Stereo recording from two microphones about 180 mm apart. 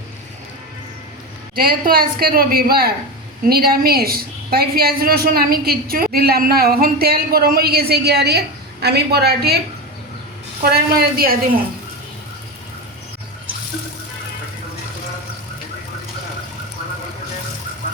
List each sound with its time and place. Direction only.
1.5 s a woman's voice: 55° right (ahead or behind)
10.6 s a woman's voice: 60° right (ahead or behind)